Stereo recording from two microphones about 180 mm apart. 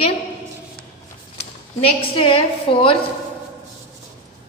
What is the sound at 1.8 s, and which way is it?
A woman's voice, 30° left (ahead or behind).